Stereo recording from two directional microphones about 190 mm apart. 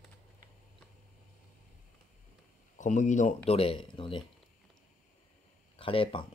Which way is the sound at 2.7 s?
40° left (ahead or behind).